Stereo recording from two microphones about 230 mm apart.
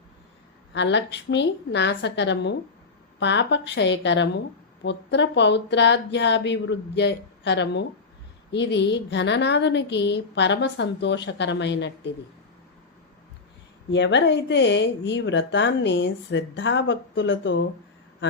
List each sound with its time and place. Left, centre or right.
0.7 s speech: left
13.9 s speech: left